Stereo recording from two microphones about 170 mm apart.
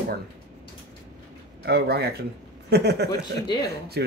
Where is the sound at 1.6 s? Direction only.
70° right (ahead or behind).